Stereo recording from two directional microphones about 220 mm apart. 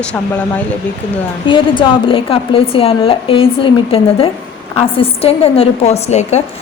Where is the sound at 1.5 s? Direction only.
20° left (ahead or behind).